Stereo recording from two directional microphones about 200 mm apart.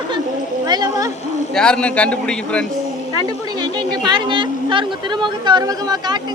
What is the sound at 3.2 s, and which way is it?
Speech, 20° right (ahead or behind).